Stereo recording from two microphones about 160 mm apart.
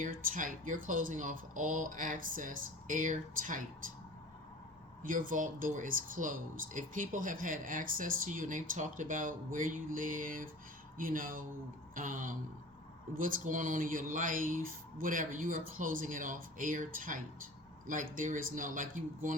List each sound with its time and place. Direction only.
0.0 s speech: 55° right (ahead or behind)
5.0 s speech: 55° right (ahead or behind)